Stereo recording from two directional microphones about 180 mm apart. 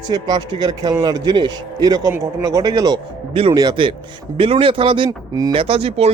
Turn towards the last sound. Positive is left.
turn(degrees=-30)  # may be behind; listen again after turning